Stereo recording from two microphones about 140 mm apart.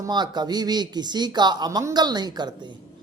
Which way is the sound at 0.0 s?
30° right (ahead or behind).